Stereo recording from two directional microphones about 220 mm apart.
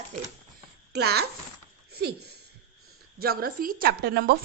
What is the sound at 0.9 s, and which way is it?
A woman's voice, 45° right (ahead or behind).